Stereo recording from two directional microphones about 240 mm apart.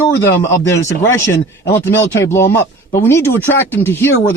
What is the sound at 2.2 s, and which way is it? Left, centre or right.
Speech, centre.